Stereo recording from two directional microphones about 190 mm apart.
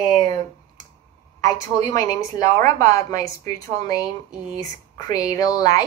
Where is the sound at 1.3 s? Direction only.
20° left (ahead or behind).